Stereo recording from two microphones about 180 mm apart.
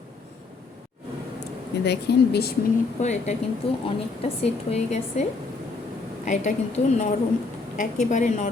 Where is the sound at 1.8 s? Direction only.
65° left (ahead or behind).